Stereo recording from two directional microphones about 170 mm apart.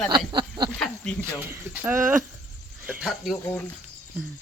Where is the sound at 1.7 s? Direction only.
10° right (ahead or behind).